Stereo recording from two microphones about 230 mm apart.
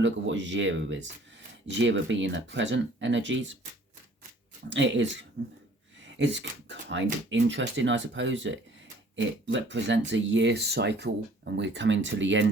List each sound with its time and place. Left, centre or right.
0.0 s speech: right
4.7 s speech: right